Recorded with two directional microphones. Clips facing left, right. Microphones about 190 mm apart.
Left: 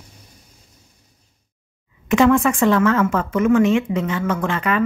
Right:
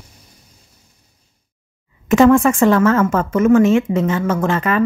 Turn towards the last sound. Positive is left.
turn(degrees=-40)  # may be behind; listen again after turning